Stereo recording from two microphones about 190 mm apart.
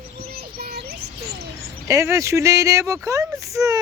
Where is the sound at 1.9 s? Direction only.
15° right (ahead or behind).